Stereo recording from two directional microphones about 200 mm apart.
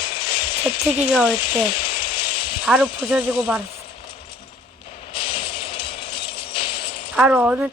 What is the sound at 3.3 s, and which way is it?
Coin, 25° left (ahead or behind).